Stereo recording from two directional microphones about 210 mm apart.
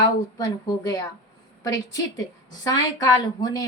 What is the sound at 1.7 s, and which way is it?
A woman's voice, 20° left (ahead or behind).